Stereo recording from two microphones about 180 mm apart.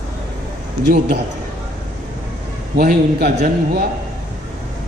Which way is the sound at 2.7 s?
60° right (ahead or behind).